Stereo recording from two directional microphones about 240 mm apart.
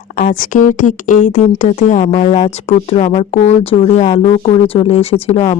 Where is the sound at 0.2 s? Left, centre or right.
Left.